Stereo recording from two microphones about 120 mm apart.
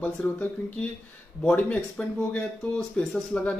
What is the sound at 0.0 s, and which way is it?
Speech, 15° left (ahead or behind).